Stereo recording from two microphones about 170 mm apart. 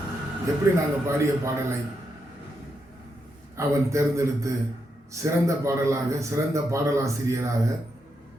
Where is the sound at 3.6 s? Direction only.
15° right (ahead or behind).